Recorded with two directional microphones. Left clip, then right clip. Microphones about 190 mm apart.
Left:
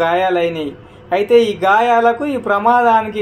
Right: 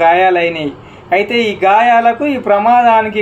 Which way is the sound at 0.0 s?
40° left (ahead or behind).